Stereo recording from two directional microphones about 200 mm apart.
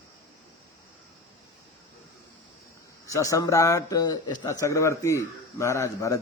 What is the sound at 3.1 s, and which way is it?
Speech, 15° left (ahead or behind).